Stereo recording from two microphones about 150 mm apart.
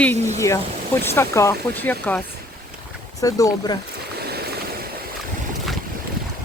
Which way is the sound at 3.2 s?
25° left (ahead or behind).